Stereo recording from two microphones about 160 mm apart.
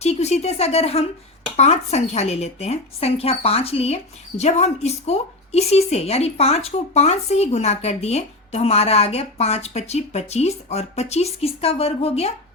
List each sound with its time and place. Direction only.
0.0 s a woman's voice: 40° left (ahead or behind)